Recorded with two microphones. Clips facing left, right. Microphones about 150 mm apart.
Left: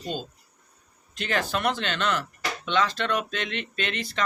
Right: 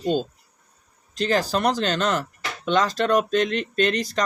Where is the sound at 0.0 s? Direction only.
45° right (ahead or behind).